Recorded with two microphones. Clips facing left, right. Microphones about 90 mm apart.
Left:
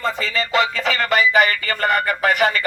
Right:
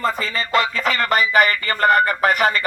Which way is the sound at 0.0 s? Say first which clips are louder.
Even; 45° right (ahead or behind).